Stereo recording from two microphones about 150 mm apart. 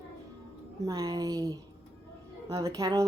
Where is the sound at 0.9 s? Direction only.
25° right (ahead or behind).